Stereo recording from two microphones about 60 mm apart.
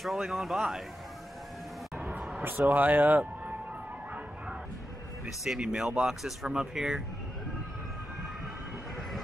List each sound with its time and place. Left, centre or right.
0.0 s speech: centre
2.1 s a sound: centre
2.7 s speech: right
5.2 s speech: centre